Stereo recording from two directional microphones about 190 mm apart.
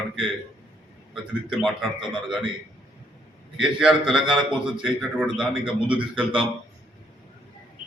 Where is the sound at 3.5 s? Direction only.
5° right (ahead or behind).